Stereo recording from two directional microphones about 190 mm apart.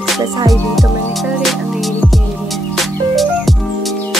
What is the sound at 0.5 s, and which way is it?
Music, centre (ahead or behind).